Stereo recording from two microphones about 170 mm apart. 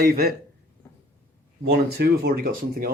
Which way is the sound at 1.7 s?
70° right (ahead or behind).